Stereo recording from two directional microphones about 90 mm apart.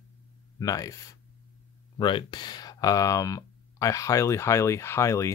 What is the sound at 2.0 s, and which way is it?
Speech, 60° left (ahead or behind).